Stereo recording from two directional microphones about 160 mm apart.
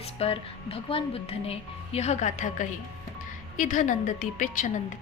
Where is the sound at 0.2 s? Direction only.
35° left (ahead or behind).